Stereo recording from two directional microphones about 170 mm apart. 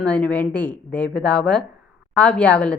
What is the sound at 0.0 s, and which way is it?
Speech, 5° left (ahead or behind).